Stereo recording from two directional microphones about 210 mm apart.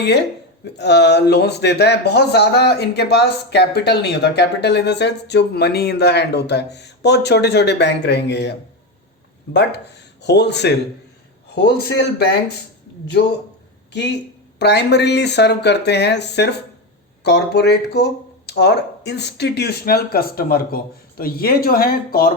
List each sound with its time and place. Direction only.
0.0 s speech: 55° left (ahead or behind)
13.9 s speech: 55° left (ahead or behind)